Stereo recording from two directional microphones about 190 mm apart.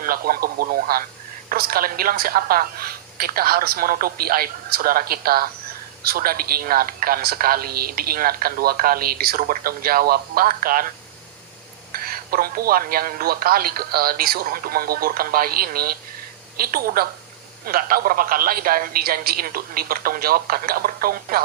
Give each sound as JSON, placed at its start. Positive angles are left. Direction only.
{"t": 0.0, "sound": "a man's voice", "side_deg": -50}
{"t": 11.9, "sound": "a man's voice", "side_deg": -50}